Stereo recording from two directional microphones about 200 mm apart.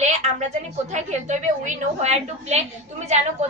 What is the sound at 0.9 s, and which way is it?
A woman's voice, 35° right (ahead or behind).